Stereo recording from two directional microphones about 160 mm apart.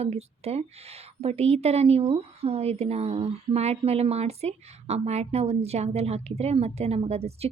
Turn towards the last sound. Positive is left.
turn(degrees=-40)  # may be behind; listen again after turning